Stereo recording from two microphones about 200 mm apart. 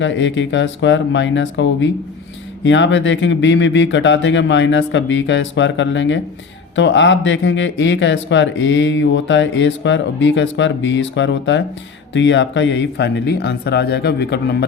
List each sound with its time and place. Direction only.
0.0 s speech: 65° left (ahead or behind)